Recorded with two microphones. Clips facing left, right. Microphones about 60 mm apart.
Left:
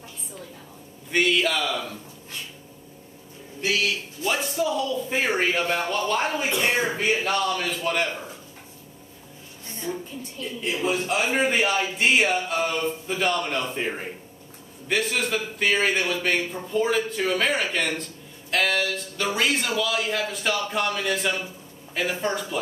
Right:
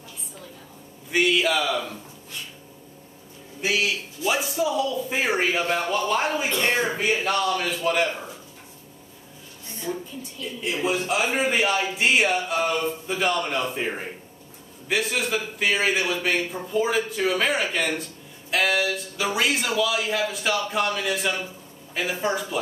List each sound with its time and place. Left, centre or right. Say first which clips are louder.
1.1 s a man's voice: right 1 dB; centre
3.6 s a man's voice: right 1 dB; centre
9.9 s a sound: right 1 dB; centre
10.4 s a man's voice: even; centre